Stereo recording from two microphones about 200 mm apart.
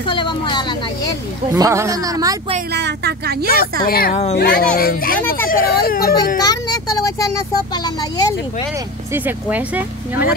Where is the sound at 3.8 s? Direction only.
45° left (ahead or behind).